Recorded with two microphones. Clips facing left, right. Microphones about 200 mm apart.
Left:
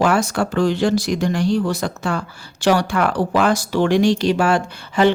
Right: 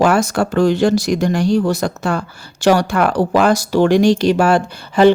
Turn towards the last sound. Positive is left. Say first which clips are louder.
# right 5 dB
turn(degrees=-40)  # may be behind; listen again after turning